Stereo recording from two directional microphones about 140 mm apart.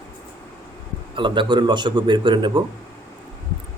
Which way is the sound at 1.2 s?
35° right (ahead or behind).